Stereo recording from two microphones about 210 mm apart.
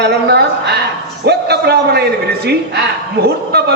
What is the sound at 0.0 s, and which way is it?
A man's voice, 50° right (ahead or behind).